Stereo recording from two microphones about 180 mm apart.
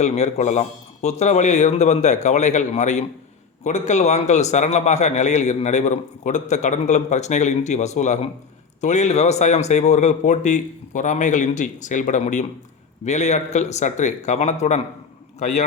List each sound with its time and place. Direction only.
0.0 s a man's voice: 40° left (ahead or behind)